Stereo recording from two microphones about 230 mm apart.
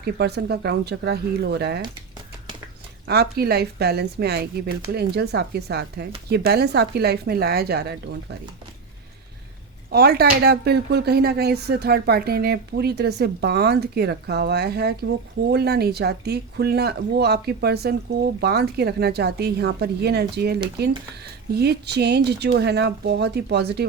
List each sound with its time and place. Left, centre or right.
0.0 s speech: right
3.1 s speech: right
9.9 s speech: right